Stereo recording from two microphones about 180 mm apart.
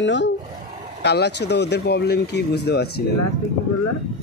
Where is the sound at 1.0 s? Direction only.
70° left (ahead or behind).